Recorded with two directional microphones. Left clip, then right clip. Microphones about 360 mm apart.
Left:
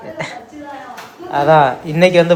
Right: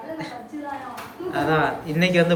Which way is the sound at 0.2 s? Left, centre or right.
Centre.